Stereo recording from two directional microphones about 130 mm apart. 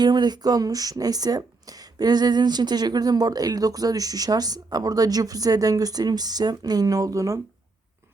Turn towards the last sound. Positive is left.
turn(degrees=-25)  # may be behind; listen again after turning